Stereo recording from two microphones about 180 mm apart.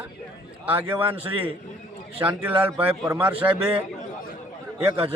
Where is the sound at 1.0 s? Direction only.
30° right (ahead or behind).